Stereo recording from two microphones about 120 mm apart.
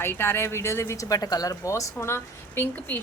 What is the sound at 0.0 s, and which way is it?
A woman's voice, 20° left (ahead or behind).